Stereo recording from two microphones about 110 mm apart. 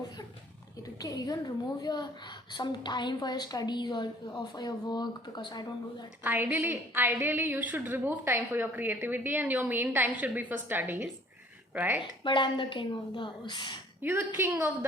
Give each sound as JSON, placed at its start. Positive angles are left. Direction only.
{"t": 0.8, "sound": "a woman's voice", "side_deg": 35}
{"t": 6.2, "sound": "a woman's voice", "side_deg": -20}
{"t": 12.2, "sound": "a woman's voice", "side_deg": 45}
{"t": 14.0, "sound": "a woman's voice", "side_deg": -20}